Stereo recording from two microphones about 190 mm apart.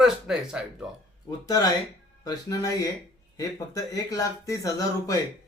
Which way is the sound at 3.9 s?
20° left (ahead or behind).